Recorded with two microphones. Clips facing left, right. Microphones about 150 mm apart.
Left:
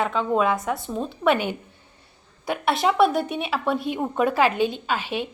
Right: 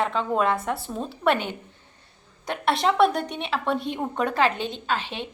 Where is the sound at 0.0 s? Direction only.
Centre (ahead or behind).